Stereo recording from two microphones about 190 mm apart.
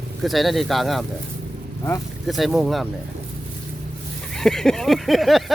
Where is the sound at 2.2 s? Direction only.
Centre (ahead or behind).